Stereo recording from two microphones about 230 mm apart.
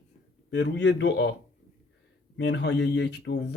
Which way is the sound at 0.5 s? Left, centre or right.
Left.